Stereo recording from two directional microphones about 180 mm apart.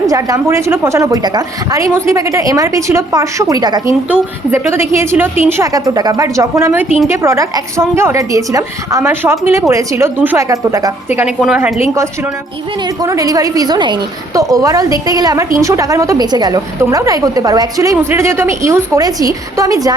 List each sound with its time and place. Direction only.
0.1 s a woman's voice: 15° right (ahead or behind)
11.3 s a woman's voice: 5° right (ahead or behind)
13.0 s a woman's voice: 20° right (ahead or behind)